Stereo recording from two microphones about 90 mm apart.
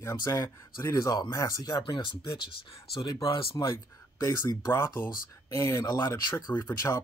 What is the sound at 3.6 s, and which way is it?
Speech, 45° left (ahead or behind).